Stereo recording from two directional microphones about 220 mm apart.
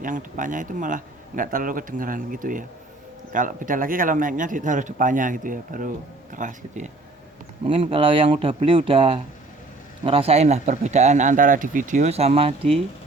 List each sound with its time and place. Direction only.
0.0 s a man's voice: 35° right (ahead or behind)
7.6 s a man's voice: 25° right (ahead or behind)